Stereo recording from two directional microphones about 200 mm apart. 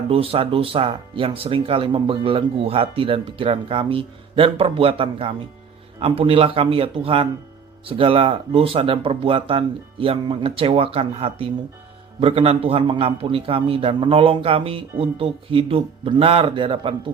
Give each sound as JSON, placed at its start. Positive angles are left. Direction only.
{"t": 0.1, "sound": "speech", "side_deg": -30}